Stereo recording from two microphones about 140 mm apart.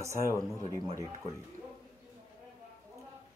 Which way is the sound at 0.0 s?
20° right (ahead or behind).